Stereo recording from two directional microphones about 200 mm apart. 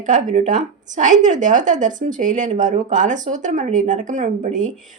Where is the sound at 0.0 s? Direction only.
40° right (ahead or behind).